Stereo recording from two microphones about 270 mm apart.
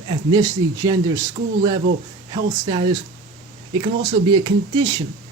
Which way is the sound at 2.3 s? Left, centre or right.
Centre.